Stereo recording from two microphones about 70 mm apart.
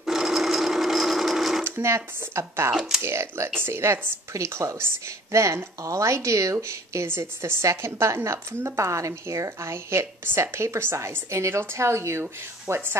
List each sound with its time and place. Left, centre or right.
0.0 s sewing machine: centre
1.6 s a woman's voice: right
2.7 s speech: centre
3.0 s a woman's voice: right